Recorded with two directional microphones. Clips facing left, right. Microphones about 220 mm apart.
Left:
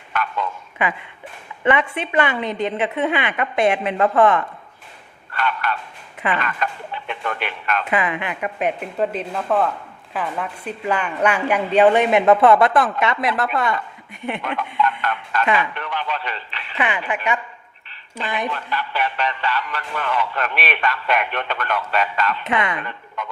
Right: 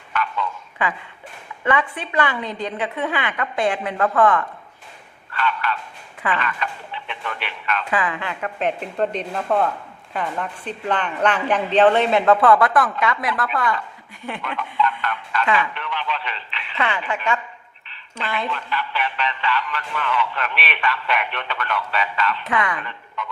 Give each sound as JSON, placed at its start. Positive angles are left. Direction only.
{"t": 0.1, "sound": "a sound", "side_deg": 45}
{"t": 0.8, "sound": "a woman's voice", "side_deg": 20}
{"t": 5.4, "sound": "a sound", "side_deg": 45}
{"t": 7.9, "sound": "a woman's voice", "side_deg": 20}
{"t": 15.0, "sound": "music", "side_deg": 45}
{"t": 15.7, "sound": "radio", "side_deg": 45}
{"t": 16.7, "sound": "a woman's voice", "side_deg": 15}
{"t": 18.5, "sound": "speech", "side_deg": 40}
{"t": 22.4, "sound": "a woman's voice", "side_deg": 25}
{"t": 22.8, "sound": "a sound", "side_deg": 45}